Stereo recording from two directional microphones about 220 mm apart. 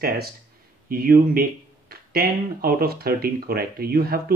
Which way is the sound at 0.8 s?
40° right (ahead or behind).